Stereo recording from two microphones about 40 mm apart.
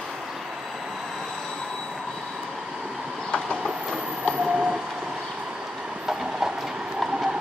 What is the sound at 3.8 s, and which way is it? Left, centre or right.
Train, centre.